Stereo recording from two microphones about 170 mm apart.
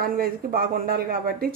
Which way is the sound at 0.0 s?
60° right (ahead or behind).